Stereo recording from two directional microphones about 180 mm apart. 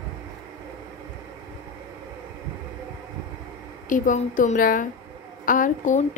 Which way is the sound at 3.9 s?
45° left (ahead or behind).